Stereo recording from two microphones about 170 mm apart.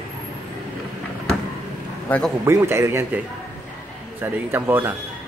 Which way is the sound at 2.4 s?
15° right (ahead or behind).